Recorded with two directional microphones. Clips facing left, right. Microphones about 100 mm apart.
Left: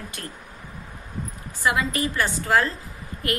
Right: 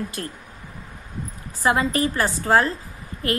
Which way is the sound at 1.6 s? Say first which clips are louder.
Right 3 dB; 35° right (ahead or behind).